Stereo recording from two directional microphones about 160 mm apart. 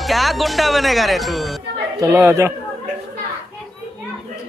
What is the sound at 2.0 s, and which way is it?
Speech, 15° right (ahead or behind).